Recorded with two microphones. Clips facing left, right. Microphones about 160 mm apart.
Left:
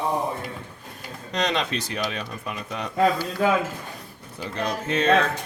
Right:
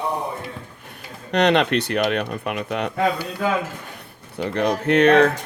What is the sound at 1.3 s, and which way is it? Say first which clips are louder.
Speech: right 8 dB; 65° right (ahead or behind).